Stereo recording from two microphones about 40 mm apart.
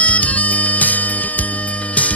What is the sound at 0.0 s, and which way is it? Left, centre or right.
Music, left.